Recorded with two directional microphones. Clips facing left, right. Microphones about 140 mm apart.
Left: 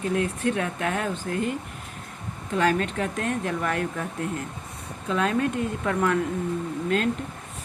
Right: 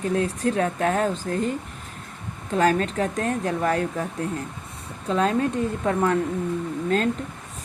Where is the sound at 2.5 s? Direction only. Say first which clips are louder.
Right 3 dB; 40° right (ahead or behind).